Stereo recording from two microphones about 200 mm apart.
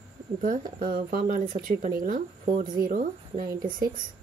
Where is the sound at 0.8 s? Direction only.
45° right (ahead or behind).